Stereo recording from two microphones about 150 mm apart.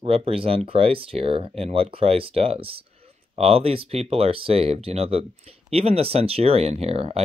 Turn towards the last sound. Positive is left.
turn(degrees=-45)  # may be behind; listen again after turning